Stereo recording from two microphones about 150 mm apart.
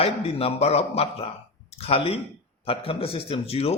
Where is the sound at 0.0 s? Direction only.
40° left (ahead or behind).